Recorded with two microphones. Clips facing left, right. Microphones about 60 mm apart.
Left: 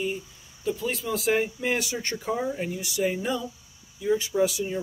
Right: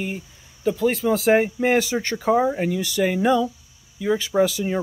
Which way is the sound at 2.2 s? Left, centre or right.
Right.